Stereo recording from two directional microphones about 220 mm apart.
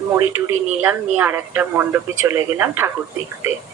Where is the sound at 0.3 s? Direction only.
10° right (ahead or behind).